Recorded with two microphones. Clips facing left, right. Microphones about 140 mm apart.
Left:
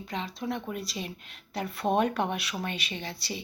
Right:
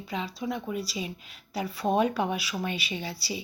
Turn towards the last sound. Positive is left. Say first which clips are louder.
# right 2 dB
turn(degrees=-5)  # may be behind; listen again after turning